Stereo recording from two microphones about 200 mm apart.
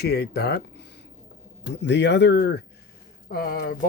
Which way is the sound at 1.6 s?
60° left (ahead or behind).